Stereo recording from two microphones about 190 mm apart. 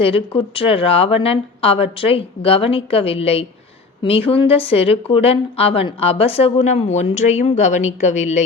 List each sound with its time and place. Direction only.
0.0 s speech: 30° left (ahead or behind)